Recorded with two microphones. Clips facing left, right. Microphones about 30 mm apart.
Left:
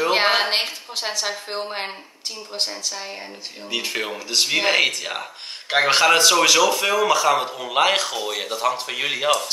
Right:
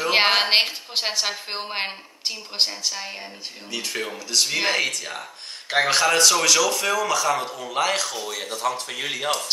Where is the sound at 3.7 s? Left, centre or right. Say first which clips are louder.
Left 4 dB; centre.